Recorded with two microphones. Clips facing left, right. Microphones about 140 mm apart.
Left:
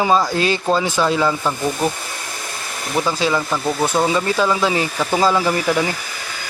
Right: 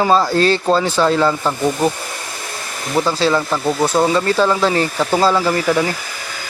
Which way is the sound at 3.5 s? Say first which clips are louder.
Right 3 dB; 5° right (ahead or behind).